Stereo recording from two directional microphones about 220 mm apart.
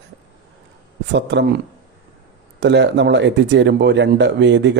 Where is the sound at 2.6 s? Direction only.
50° right (ahead or behind).